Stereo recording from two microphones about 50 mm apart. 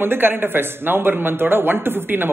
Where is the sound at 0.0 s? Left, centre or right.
Right.